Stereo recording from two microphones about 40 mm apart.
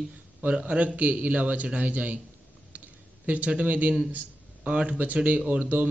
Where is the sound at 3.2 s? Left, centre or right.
Right.